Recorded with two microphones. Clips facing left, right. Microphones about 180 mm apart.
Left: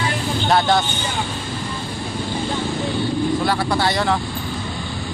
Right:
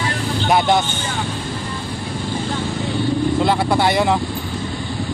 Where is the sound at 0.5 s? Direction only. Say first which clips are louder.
Right 1 dB; 20° right (ahead or behind).